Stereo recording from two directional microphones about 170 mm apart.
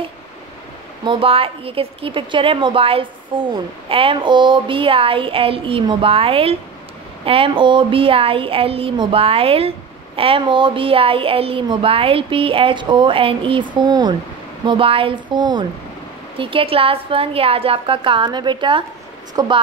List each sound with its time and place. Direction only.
1.0 s a woman's voice: 30° right (ahead or behind)